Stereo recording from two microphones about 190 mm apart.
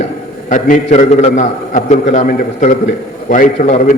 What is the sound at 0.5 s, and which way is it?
A man's voice, 40° left (ahead or behind).